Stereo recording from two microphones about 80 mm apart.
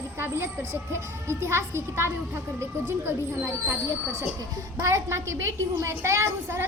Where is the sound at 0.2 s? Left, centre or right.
Right.